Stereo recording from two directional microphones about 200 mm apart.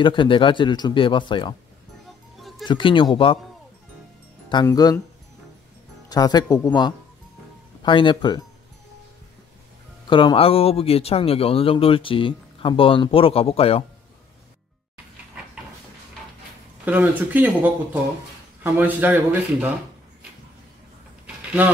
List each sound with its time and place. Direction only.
0.0 s speech: 25° left (ahead or behind)
2.0 s music: centre (ahead or behind)
2.6 s speech: 25° left (ahead or behind)
4.5 s speech: 20° left (ahead or behind)
6.0 s speech: 20° left (ahead or behind)
10.0 s speech: 25° left (ahead or behind)
16.8 s speech: 10° right (ahead or behind)
21.5 s speech: 10° right (ahead or behind)